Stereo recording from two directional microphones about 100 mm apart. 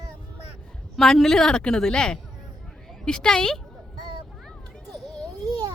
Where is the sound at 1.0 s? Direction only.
5° left (ahead or behind).